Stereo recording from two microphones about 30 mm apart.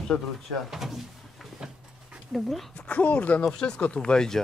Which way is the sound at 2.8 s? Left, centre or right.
Left.